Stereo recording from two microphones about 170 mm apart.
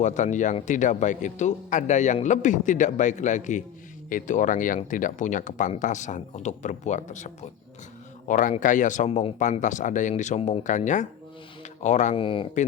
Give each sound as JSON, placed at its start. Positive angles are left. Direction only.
{"t": 0.0, "sound": "speech", "side_deg": 45}
{"t": 12.1, "sound": "speech", "side_deg": 30}